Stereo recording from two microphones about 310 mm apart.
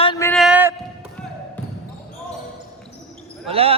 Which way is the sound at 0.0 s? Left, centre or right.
Centre.